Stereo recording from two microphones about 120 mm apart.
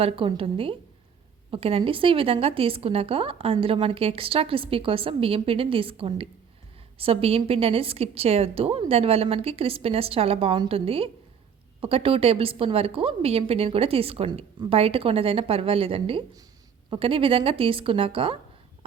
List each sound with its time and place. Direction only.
0.0 s a woman's voice: 50° right (ahead or behind)